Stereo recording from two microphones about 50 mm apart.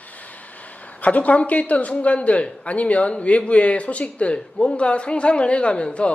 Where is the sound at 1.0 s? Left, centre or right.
Left.